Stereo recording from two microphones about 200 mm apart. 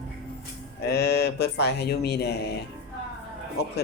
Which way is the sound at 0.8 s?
55° left (ahead or behind).